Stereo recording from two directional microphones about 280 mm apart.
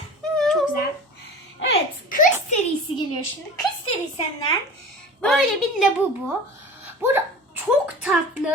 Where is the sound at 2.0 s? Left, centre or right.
Left.